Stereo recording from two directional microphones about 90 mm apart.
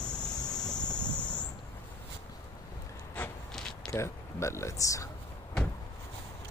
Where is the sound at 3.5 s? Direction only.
5° left (ahead or behind).